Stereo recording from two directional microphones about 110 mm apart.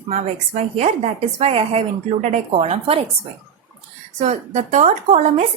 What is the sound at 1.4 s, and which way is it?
Speech, 65° right (ahead or behind).